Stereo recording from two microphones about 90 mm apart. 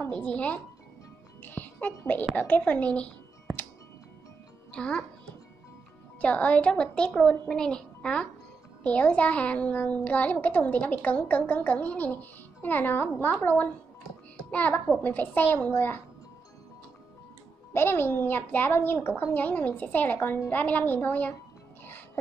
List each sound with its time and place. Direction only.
0.1 s a child's voice: 15° left (ahead or behind)
4.7 s a child's voice: 10° left (ahead or behind)
6.2 s a child's voice: 15° left (ahead or behind)
17.7 s a child's voice: 25° left (ahead or behind)
21.8 s music: 20° left (ahead or behind)